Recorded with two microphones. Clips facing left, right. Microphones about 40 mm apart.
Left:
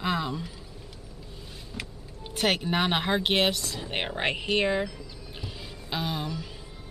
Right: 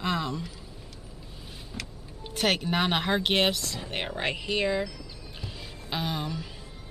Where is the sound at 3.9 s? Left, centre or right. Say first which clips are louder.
Left 2 dB; centre.